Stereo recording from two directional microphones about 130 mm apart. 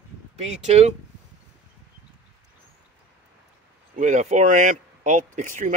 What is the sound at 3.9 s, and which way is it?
Speech, 70° right (ahead or behind).